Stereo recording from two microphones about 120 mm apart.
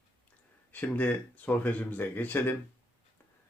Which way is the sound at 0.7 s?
15° left (ahead or behind).